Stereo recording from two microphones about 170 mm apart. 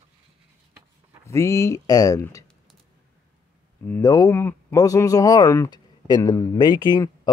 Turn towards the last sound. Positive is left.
turn(degrees=25)  # may be behind; listen again after turning